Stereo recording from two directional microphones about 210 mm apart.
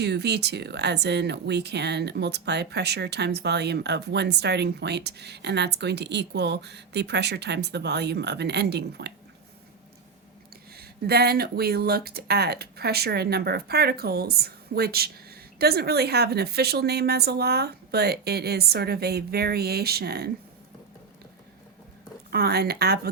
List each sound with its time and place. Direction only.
0.0 s speech: 50° right (ahead or behind)
10.8 s speech: 50° right (ahead or behind)
22.3 s speech: 50° right (ahead or behind)